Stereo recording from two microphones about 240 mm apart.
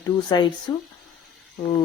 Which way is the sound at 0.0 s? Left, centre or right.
Centre.